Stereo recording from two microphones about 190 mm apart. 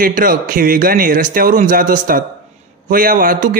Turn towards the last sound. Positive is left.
turn(degrees=-45)  # may be behind; listen again after turning